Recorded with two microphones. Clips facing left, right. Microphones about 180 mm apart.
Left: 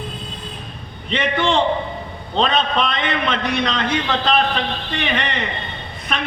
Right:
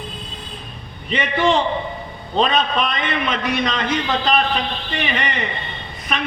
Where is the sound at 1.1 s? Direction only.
10° right (ahead or behind).